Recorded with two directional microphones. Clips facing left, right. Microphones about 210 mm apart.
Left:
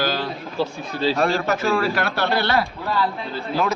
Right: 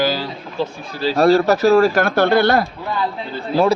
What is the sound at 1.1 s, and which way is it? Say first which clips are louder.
Speech: right 8 dB; 35° right (ahead or behind).